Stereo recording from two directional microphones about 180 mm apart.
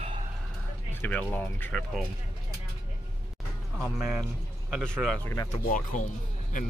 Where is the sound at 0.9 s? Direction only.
10° left (ahead or behind).